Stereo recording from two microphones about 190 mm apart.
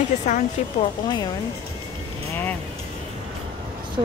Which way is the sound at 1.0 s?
20° left (ahead or behind).